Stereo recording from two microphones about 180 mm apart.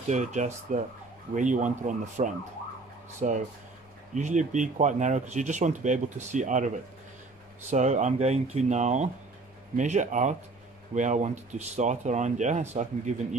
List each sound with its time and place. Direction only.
0.1 s speech: 40° right (ahead or behind)
7.7 s speech: 40° right (ahead or behind)